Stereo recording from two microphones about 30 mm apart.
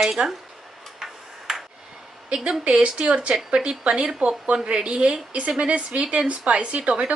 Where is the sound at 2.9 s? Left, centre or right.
Right.